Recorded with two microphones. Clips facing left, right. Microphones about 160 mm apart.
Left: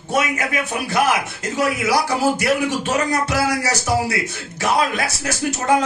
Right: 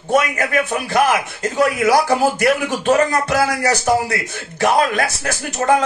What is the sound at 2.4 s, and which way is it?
Speech, 50° right (ahead or behind).